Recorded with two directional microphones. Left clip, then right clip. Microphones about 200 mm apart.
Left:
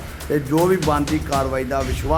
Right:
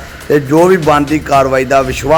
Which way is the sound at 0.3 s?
20° right (ahead or behind).